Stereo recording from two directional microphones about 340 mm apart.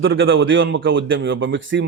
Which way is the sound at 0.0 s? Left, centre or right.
Right.